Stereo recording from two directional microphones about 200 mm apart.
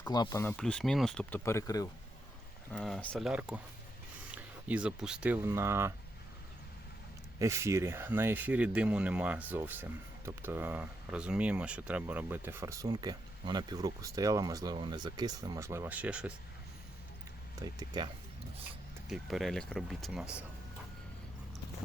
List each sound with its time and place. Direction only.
0.1 s speech: 20° left (ahead or behind)
2.7 s speech: centre (ahead or behind)
7.3 s speech: 15° right (ahead or behind)
17.6 s speech: 20° right (ahead or behind)
19.0 s speech: centre (ahead or behind)